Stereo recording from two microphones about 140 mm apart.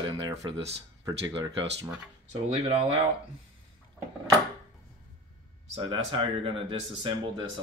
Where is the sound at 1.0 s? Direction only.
25° right (ahead or behind).